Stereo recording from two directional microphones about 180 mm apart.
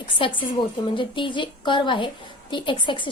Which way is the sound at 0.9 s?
25° left (ahead or behind).